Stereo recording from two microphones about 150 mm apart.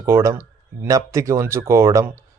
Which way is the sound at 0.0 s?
20° right (ahead or behind).